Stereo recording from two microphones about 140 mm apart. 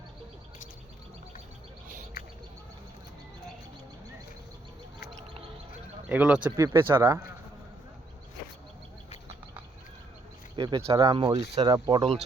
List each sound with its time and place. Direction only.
6.1 s speech: 10° right (ahead or behind)
10.5 s speech: 35° right (ahead or behind)